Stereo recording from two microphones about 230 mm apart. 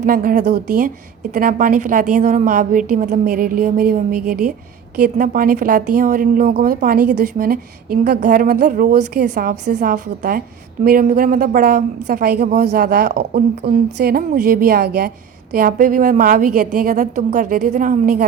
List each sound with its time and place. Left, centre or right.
0.0 s a woman's voice: right